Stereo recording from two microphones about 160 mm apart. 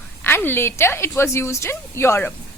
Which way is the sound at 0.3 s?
15° left (ahead or behind).